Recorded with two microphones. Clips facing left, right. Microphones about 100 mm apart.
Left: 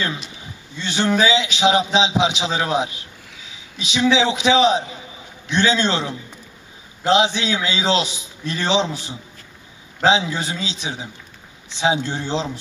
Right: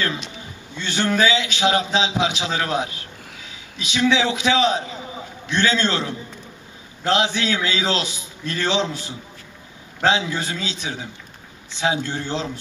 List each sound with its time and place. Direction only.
0.7 s a man's voice: 15° left (ahead or behind)